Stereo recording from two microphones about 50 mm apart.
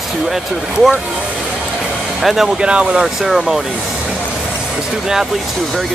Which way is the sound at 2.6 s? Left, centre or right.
Right.